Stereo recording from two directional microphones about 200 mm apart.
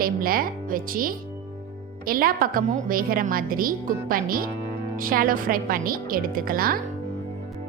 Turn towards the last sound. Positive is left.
turn(degrees=-45)  # may be behind; listen again after turning